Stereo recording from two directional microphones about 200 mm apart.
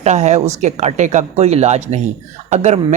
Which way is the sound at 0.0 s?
35° right (ahead or behind).